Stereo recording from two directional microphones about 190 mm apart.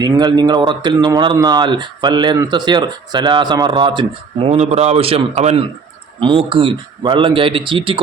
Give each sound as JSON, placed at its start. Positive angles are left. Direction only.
{"t": 0.0, "sound": "speech", "side_deg": -20}
{"t": 4.4, "sound": "a man's voice", "side_deg": -35}